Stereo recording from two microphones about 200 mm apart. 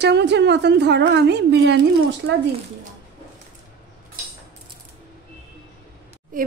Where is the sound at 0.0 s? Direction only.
60° right (ahead or behind).